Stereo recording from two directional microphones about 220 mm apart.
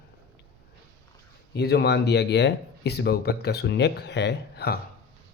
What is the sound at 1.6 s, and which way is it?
Speech, 45° left (ahead or behind).